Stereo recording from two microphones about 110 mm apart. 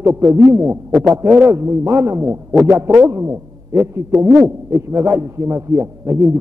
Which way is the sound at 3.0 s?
25° right (ahead or behind).